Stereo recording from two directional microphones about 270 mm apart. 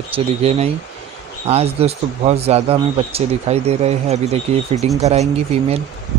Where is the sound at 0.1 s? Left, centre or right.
Right.